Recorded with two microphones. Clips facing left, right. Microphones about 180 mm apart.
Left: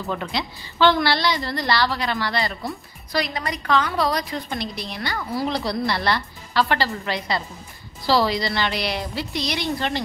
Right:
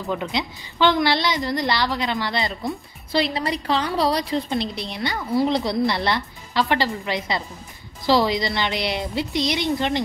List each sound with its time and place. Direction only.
0.1 s a woman's voice: 15° right (ahead or behind)